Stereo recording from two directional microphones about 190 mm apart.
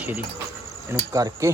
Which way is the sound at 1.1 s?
15° right (ahead or behind).